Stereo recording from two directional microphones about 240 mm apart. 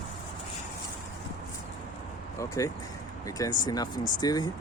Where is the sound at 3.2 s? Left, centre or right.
Centre.